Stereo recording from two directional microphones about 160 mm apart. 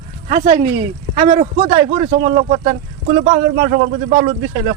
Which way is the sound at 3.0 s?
55° right (ahead or behind).